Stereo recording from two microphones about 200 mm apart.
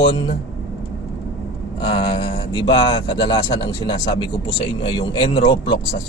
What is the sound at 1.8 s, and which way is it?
Speech, 20° left (ahead or behind).